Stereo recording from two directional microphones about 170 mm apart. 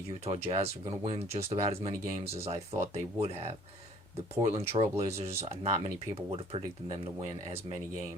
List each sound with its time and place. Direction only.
0.3 s speech: 35° right (ahead or behind)
4.5 s speech: 40° right (ahead or behind)